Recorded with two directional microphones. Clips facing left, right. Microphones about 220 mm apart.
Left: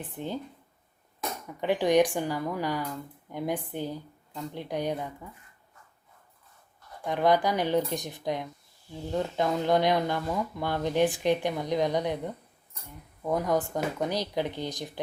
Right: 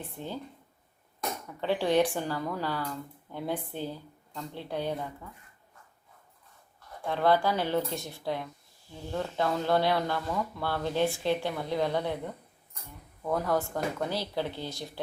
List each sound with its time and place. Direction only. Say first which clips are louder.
0.0 s speech: left 3 dB; 20° left (ahead or behind)
1.6 s speech: left 3 dB; 15° left (ahead or behind)
7.0 s speech: left 1 dB; 15° left (ahead or behind)